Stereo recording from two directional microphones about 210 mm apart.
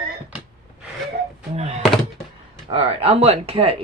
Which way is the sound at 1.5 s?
30° right (ahead or behind).